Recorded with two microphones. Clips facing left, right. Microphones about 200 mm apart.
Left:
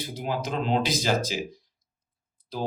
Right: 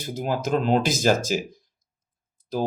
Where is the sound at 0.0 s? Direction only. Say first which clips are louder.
Right 4 dB; 45° right (ahead or behind).